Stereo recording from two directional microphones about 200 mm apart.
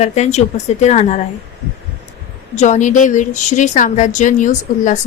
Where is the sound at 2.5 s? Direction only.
35° left (ahead or behind).